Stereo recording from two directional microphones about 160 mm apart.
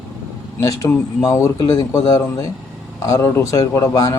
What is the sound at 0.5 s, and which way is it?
A man's voice, 20° left (ahead or behind).